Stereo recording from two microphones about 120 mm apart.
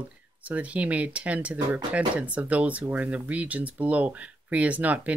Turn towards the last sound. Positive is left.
turn(degrees=-10)  # may be behind; listen again after turning